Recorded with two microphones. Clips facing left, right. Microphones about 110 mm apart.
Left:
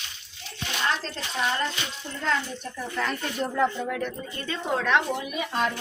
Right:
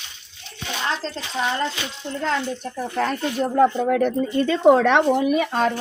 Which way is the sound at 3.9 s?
70° right (ahead or behind).